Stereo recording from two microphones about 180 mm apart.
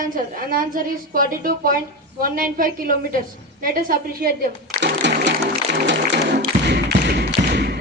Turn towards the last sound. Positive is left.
turn(degrees=-65)  # may be behind; listen again after turning